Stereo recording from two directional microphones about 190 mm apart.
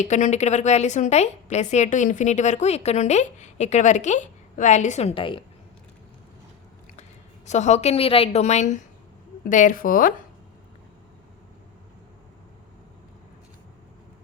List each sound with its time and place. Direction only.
0.0 s a woman's voice: 40° left (ahead or behind)
7.4 s a woman's voice: 40° left (ahead or behind)